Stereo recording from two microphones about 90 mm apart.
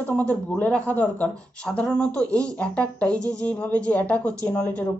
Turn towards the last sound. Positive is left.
turn(degrees=15)  # may be behind; listen again after turning